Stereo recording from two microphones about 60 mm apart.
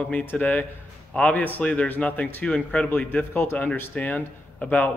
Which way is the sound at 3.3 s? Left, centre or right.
Left.